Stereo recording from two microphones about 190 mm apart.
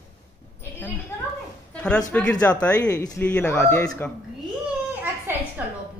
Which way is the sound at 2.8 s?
20° left (ahead or behind).